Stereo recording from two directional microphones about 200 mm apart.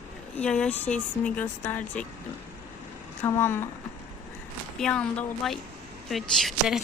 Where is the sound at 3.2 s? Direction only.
10° left (ahead or behind).